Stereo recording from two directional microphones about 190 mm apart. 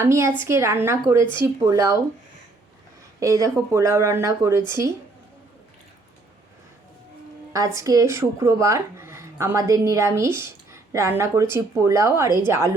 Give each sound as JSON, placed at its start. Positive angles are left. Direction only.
{"t": 0.0, "sound": "speech", "side_deg": -15}
{"t": 3.2, "sound": "speech", "side_deg": -15}
{"t": 7.5, "sound": "speech", "side_deg": -15}